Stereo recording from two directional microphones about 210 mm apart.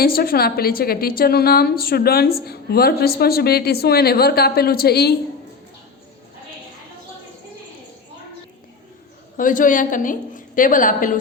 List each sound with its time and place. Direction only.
0.0 s a woman's voice: 45° left (ahead or behind)
9.4 s a woman's voice: 40° left (ahead or behind)